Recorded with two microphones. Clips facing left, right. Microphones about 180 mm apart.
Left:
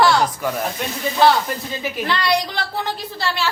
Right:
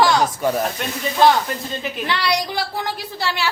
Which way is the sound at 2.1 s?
10° right (ahead or behind).